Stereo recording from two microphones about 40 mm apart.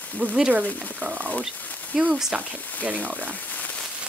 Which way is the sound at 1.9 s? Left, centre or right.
Centre.